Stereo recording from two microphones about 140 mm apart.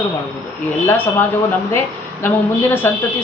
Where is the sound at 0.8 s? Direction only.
15° left (ahead or behind).